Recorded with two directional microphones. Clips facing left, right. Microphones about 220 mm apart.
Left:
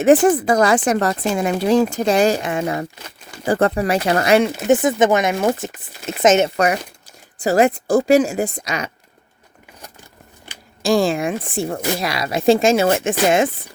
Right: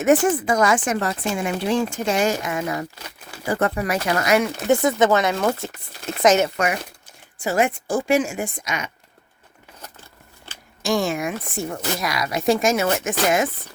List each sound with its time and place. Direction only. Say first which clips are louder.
0.0 s speech: left 5 dB; 35° left (ahead or behind)
4.7 s speech: left 2 dB; 20° left (ahead or behind)
6.6 s speech: left 5 dB; 35° left (ahead or behind)
10.8 s speech: left 5 dB; 30° left (ahead or behind)